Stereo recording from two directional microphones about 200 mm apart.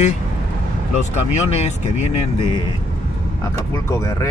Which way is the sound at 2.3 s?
25° left (ahead or behind).